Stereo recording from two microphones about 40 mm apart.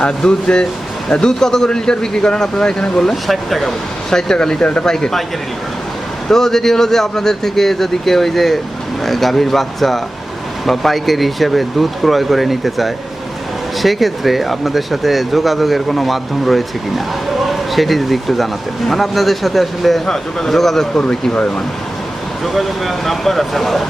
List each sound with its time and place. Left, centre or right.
0.0 s a man's voice: left
4.6 s speech: left
4.9 s a man's voice: centre
6.2 s a man's voice: centre
20.9 s speech: left
22.5 s speech: centre